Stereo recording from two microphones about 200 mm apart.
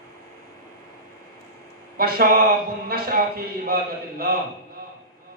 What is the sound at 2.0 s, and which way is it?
A man's voice, 50° right (ahead or behind).